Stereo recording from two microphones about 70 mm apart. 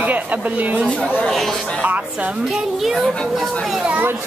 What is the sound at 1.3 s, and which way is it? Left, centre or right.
Speech, centre.